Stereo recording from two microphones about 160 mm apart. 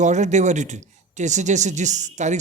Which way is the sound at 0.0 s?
50° right (ahead or behind).